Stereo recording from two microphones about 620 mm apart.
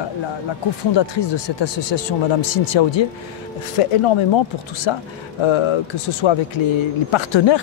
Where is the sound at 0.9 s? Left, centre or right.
Left.